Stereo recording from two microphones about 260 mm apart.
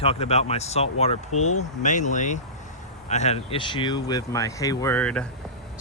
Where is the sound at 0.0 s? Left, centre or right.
Left.